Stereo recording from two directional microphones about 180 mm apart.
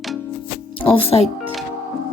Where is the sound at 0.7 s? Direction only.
30° left (ahead or behind).